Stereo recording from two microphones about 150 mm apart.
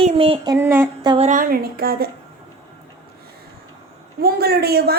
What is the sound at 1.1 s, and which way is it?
Speech, 55° right (ahead or behind).